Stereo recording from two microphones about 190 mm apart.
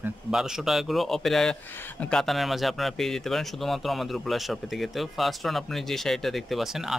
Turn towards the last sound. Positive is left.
turn(degrees=0)  # may be behind; listen again after turning